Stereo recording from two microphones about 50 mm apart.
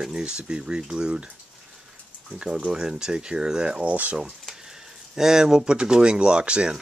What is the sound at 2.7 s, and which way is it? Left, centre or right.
Speech, centre.